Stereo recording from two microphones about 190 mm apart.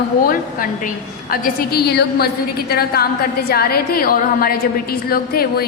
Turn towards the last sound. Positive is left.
turn(degrees=55)  # may be behind; listen again after turning